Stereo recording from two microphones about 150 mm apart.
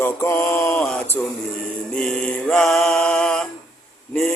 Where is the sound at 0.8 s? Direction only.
5° left (ahead or behind).